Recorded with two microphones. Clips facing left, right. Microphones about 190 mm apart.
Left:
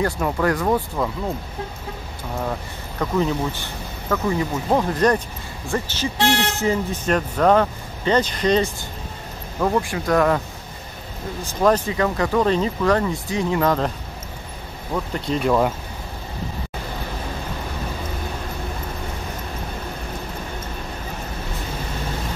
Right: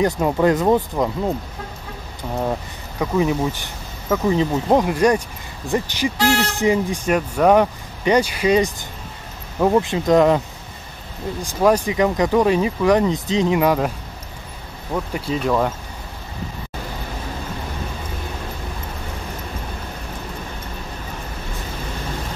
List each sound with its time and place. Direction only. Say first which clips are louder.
0.0 s speech: right 4 dB; 20° right (ahead or behind)
3.0 s speech: right 2 dB; 10° right (ahead or behind)
6.1 s speech: right 1 dB; 20° left (ahead or behind)
6.5 s speech: right 3 dB; 15° right (ahead or behind)
9.6 s speech: right 4 dB; 20° right (ahead or behind)
11.4 s speech: right 2 dB; 15° right (ahead or behind)
15.1 s speech: left 1 dB; 5° right (ahead or behind)